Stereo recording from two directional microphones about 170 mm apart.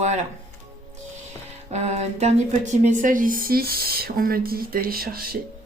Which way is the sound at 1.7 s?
40° right (ahead or behind).